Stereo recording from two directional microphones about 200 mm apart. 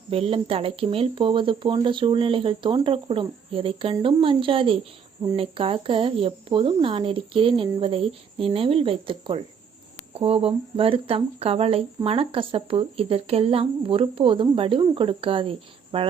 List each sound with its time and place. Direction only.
0.1 s speech: 30° right (ahead or behind)